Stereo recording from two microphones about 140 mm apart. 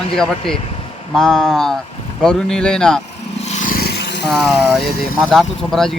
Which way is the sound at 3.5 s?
65° left (ahead or behind).